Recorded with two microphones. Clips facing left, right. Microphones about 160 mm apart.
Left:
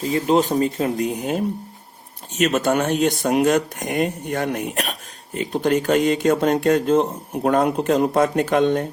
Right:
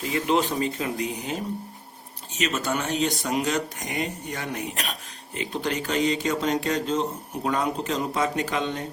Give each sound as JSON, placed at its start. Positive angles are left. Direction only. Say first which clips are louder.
{"t": 0.0, "sound": "speech", "louder": "left 5 dB", "side_deg": 40}
{"t": 2.4, "sound": "speech", "louder": "left 8 dB", "side_deg": 55}